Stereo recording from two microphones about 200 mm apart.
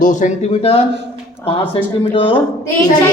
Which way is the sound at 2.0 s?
30° left (ahead or behind).